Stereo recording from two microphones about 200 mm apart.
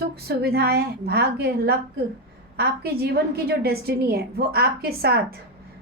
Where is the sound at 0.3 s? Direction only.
50° right (ahead or behind).